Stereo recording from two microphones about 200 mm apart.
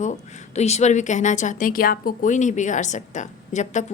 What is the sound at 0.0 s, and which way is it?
Speech, 35° left (ahead or behind).